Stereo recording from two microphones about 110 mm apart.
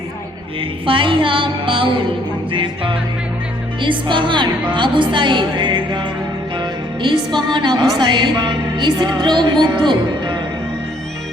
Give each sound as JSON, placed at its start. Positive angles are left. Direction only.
{"t": 0.9, "sound": "speech", "side_deg": -50}